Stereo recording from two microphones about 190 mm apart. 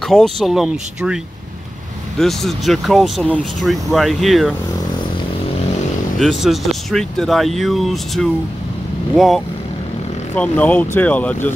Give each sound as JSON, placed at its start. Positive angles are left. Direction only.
{"t": 0.0, "sound": "speech", "side_deg": 0}
{"t": 6.1, "sound": "speech", "side_deg": 0}